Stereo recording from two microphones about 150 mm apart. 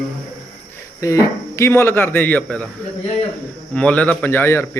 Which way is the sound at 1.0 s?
20° left (ahead or behind).